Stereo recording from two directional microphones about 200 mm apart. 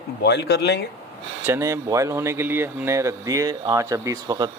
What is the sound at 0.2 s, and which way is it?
Speech, 60° left (ahead or behind).